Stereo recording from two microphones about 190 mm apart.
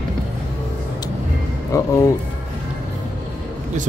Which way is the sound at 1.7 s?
15° left (ahead or behind).